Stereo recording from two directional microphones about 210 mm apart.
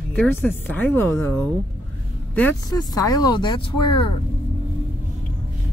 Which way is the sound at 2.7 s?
20° left (ahead or behind).